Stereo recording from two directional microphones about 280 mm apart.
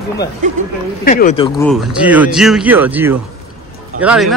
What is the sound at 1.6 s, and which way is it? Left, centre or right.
Speech, centre.